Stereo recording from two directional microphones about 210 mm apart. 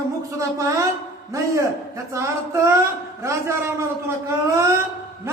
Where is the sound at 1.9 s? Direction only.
15° right (ahead or behind).